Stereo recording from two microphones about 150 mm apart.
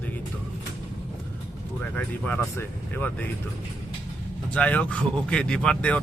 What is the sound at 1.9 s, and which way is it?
Speech, 10° left (ahead or behind).